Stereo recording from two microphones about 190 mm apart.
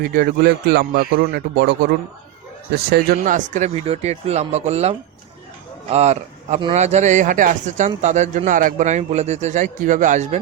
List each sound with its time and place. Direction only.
0.0 s a man's voice: 50° right (ahead or behind)
2.9 s a man's voice: 50° right (ahead or behind)